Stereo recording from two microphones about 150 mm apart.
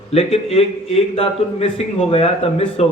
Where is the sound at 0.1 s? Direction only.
40° left (ahead or behind).